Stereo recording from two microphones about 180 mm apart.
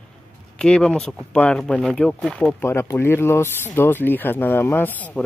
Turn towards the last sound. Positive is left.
turn(degrees=10)  # may be behind; listen again after turning